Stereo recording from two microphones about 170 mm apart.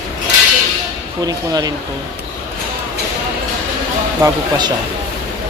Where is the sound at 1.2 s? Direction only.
20° right (ahead or behind).